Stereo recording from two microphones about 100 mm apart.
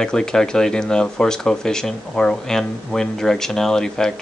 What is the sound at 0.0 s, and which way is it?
Speech, 5° left (ahead or behind).